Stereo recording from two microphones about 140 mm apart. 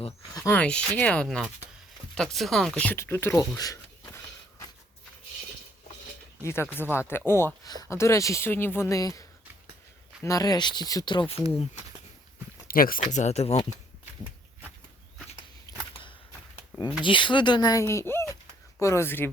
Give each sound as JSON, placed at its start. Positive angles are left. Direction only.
{"t": 0.5, "sound": "speech", "side_deg": 10}
{"t": 6.4, "sound": "speech", "side_deg": 20}
{"t": 10.2, "sound": "speech", "side_deg": 25}
{"t": 12.6, "sound": "speech", "side_deg": 90}
{"t": 15.7, "sound": "a sound", "side_deg": 25}
{"t": 17.0, "sound": "speech", "side_deg": 35}